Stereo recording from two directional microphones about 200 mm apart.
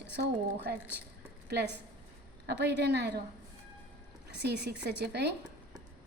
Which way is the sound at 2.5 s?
55° right (ahead or behind).